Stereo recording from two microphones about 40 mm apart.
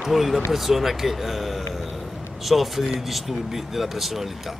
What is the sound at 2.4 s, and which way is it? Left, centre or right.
Speech, centre.